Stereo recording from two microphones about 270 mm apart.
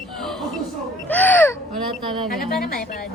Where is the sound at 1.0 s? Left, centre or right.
Centre.